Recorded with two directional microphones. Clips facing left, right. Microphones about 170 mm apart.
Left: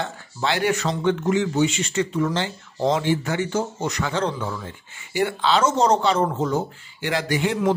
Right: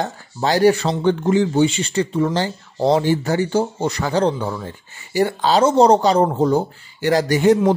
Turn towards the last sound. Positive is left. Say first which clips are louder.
# right 9 dB
turn(degrees=-40)  # may be behind; listen again after turning